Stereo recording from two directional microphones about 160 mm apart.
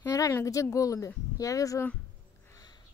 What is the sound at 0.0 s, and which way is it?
Speech, 20° left (ahead or behind).